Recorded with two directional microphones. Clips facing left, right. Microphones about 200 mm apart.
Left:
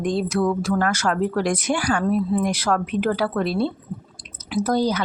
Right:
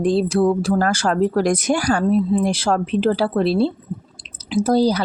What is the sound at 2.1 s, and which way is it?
Speech, 25° right (ahead or behind).